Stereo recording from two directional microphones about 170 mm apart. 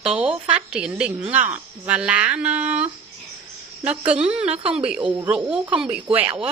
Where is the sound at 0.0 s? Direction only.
5° right (ahead or behind).